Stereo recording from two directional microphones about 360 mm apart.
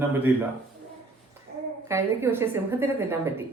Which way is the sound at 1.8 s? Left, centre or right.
Centre.